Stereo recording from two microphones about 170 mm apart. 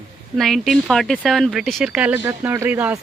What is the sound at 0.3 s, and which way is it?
A woman's voice, centre (ahead or behind).